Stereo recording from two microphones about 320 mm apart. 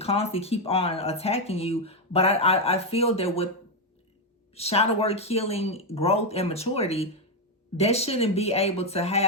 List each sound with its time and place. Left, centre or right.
0.0 s speech: centre
4.5 s speech: centre